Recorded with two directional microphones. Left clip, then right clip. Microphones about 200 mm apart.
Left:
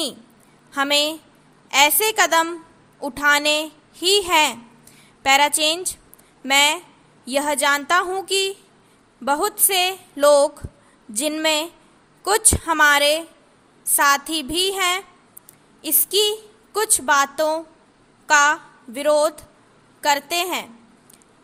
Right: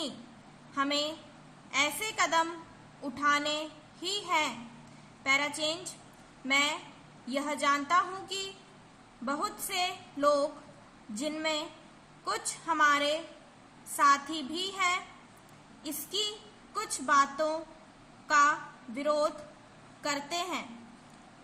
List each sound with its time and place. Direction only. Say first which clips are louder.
0.7 s a woman's voice: left 12 dB; 50° left (ahead or behind)